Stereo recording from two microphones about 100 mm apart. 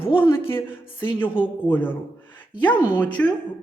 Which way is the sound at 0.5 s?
60° left (ahead or behind).